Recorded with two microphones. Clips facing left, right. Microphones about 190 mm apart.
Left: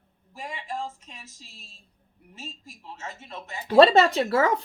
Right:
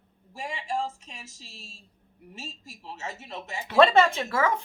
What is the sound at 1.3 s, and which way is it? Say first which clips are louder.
Speech: right 3 dB; 80° right.